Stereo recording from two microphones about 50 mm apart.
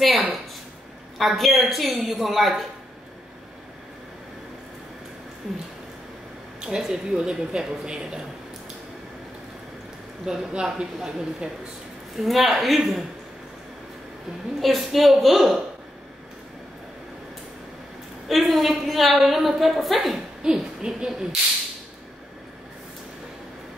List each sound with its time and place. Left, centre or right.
0.0 s a sound: centre
1.1 s a woman's voice: centre
6.6 s a woman's voice: centre
10.5 s a woman's voice: centre
14.6 s a woman's voice: centre
18.3 s a woman's voice: centre
20.4 s a woman's voice: centre